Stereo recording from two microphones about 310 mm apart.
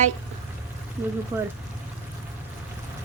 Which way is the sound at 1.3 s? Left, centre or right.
Centre.